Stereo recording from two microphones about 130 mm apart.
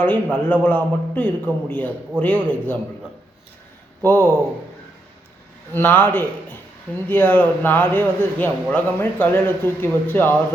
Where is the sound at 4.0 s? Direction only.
15° left (ahead or behind).